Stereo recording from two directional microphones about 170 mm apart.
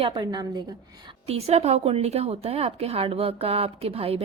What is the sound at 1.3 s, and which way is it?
Speech, 40° right (ahead or behind).